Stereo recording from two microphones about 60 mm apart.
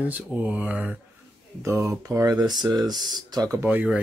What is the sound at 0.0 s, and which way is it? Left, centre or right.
Speech, right.